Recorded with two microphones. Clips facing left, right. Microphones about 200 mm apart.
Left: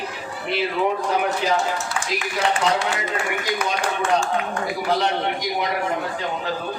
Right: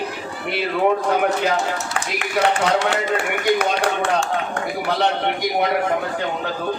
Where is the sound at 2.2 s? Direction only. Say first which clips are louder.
Right 4 dB; 65° right (ahead or behind).